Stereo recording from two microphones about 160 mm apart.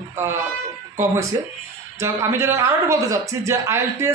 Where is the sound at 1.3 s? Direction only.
20° right (ahead or behind).